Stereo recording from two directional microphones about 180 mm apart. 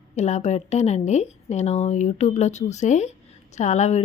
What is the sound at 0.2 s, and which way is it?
Speech, 40° left (ahead or behind).